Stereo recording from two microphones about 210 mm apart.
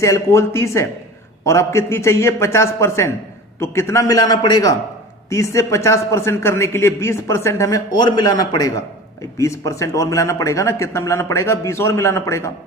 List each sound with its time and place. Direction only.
0.0 s a man's voice: 15° left (ahead or behind)